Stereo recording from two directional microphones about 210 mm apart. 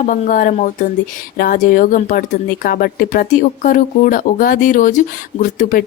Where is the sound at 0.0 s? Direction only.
40° left (ahead or behind).